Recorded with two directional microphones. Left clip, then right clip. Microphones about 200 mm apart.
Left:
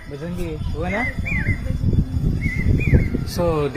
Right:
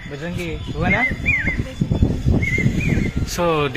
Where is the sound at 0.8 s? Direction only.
10° right (ahead or behind).